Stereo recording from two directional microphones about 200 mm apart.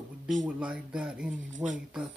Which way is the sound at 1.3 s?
40° right (ahead or behind).